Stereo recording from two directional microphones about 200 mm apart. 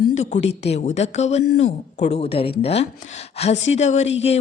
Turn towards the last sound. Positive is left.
turn(degrees=35)  # may be behind; listen again after turning